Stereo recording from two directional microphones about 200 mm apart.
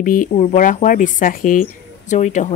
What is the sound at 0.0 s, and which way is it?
Speech, 40° left (ahead or behind).